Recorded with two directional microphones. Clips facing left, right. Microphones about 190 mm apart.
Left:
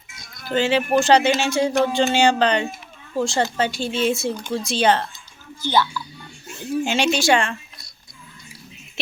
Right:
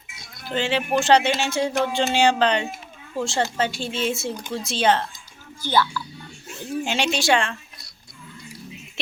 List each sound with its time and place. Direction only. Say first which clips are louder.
0.2 s speech: left 5 dB; centre (ahead or behind)
6.5 s speech: left 4 dB; centre (ahead or behind)